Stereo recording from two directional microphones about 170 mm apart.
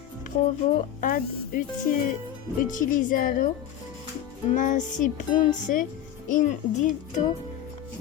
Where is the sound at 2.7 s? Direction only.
50° left (ahead or behind).